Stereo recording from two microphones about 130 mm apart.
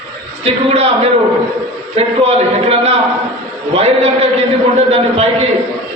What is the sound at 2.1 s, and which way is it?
A man's voice, 55° right (ahead or behind).